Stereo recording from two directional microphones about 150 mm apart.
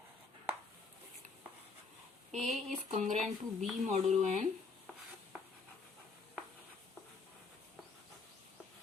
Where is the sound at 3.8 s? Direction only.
50° right (ahead or behind).